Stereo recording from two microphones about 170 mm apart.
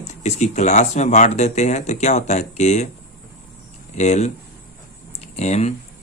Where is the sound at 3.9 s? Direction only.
40° left (ahead or behind).